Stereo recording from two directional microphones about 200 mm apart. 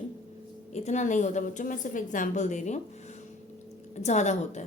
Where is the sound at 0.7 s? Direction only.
35° left (ahead or behind).